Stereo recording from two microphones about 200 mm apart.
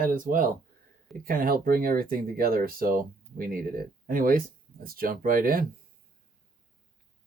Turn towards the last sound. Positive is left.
turn(degrees=-45)  # may be behind; listen again after turning